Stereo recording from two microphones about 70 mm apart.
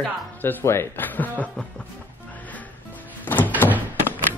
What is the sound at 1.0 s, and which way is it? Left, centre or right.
Speech, left.